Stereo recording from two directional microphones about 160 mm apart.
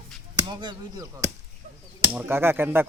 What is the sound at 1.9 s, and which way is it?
Speech, 10° right (ahead or behind).